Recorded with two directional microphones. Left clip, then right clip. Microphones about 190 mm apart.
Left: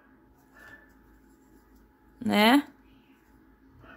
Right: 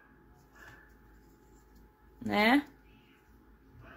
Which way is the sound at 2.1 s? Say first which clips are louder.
Left 5 dB; 30° left (ahead or behind).